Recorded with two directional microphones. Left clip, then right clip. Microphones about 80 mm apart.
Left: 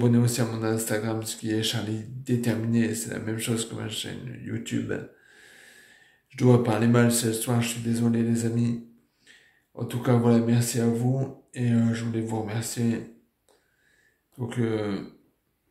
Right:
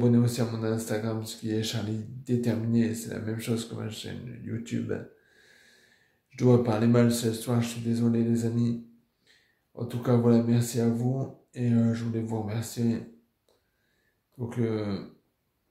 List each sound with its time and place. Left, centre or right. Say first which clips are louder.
0.0 s speech: left 1 dB; right
9.8 s speech: left 2 dB; right
14.4 s speech: left 3 dB; right